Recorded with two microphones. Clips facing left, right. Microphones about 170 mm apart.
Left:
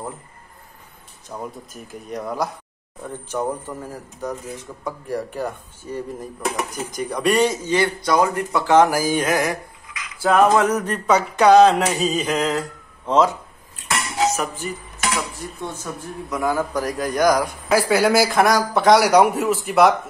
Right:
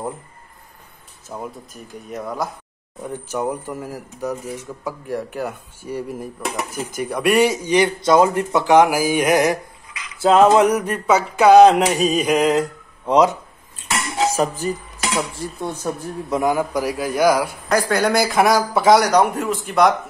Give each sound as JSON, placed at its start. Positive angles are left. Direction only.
{"t": 1.3, "sound": "a man's voice", "side_deg": 0}
{"t": 3.0, "sound": "speech", "side_deg": -10}
{"t": 10.7, "sound": "speech", "side_deg": -10}
{"t": 14.2, "sound": "speech", "side_deg": -30}
{"t": 16.5, "sound": "speech", "side_deg": -10}
{"t": 17.6, "sound": "a man's voice", "side_deg": 5}
{"t": 19.0, "sound": "a man's voice", "side_deg": 10}